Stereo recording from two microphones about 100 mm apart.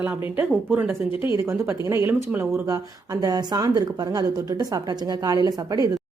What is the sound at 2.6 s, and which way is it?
Speech, 35° right (ahead or behind).